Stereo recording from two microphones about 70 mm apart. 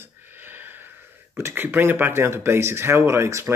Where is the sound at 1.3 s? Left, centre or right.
Right.